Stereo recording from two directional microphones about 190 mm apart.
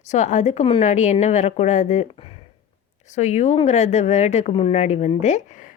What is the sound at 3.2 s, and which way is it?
Speech, 40° left (ahead or behind).